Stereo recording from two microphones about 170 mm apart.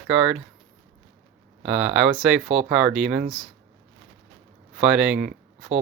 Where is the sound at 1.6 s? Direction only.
5° right (ahead or behind).